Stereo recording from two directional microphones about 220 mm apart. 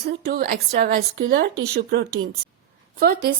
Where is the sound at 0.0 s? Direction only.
45° right (ahead or behind).